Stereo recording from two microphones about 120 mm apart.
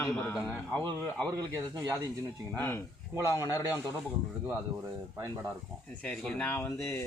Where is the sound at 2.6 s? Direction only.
15° left (ahead or behind).